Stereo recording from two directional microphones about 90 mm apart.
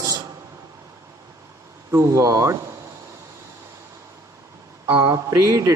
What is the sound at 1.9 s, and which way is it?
Speech, 35° right (ahead or behind).